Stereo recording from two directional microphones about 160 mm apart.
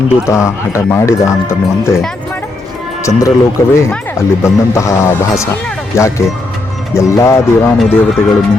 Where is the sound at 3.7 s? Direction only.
15° left (ahead or behind).